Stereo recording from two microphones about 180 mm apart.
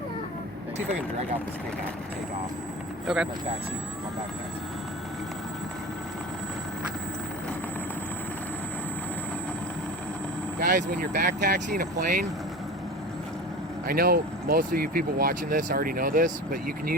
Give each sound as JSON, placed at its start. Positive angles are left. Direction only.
{"t": 3.1, "sound": "speech", "side_deg": 0}
{"t": 10.7, "sound": "speech", "side_deg": -50}
{"t": 13.8, "sound": "speech", "side_deg": -55}